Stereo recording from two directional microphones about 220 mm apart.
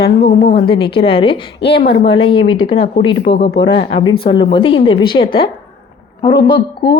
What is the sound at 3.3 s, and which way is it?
Speech, 45° left (ahead or behind).